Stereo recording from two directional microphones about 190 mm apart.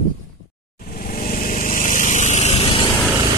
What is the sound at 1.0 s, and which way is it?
Vehicle, 45° left (ahead or behind).